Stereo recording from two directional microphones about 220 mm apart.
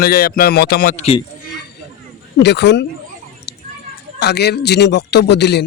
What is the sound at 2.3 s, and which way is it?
Speech, 50° left (ahead or behind).